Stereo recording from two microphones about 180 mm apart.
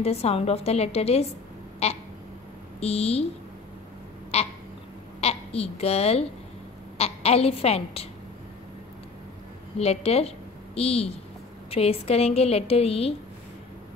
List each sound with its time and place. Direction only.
0.0 s a woman's voice: 35° left (ahead or behind)
4.3 s a woman's voice: 35° left (ahead or behind)
9.8 s a woman's voice: 35° left (ahead or behind)